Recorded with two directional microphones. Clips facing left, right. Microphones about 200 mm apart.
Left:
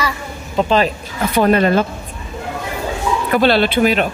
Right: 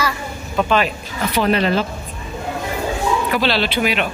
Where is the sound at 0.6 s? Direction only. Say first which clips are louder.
Left 3 dB; 30° left (ahead or behind).